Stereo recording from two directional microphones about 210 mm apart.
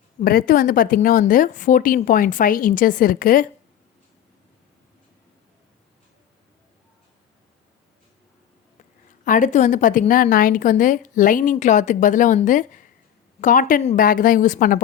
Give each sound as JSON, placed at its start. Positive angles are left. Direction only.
{"t": 0.2, "sound": "a woman's voice", "side_deg": 45}
{"t": 9.2, "sound": "a woman's voice", "side_deg": 40}